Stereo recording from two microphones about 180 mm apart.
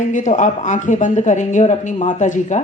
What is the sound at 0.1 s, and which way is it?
Speech, 45° left (ahead or behind).